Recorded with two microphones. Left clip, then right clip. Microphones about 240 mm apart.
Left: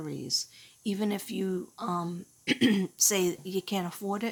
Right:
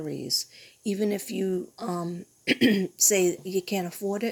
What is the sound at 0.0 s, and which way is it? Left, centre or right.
Speech, centre.